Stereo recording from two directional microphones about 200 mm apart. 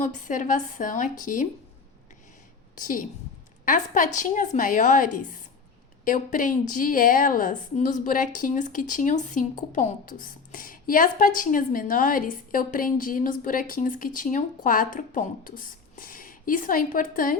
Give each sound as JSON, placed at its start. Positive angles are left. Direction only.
{"t": 0.0, "sound": "a woman's voice", "side_deg": 40}
{"t": 2.7, "sound": "a woman's voice", "side_deg": 40}